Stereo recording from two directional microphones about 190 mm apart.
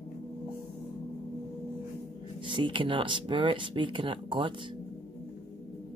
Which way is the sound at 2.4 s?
25° right (ahead or behind).